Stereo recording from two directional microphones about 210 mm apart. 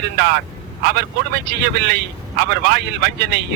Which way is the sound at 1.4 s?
50° right (ahead or behind).